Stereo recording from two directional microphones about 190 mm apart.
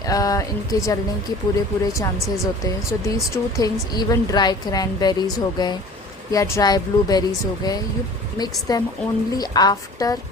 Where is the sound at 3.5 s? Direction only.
20° left (ahead or behind).